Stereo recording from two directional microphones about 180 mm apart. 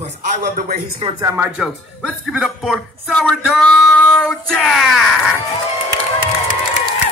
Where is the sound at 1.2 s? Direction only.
15° right (ahead or behind).